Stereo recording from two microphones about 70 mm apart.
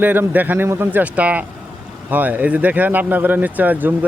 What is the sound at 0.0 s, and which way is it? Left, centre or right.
Speech, right.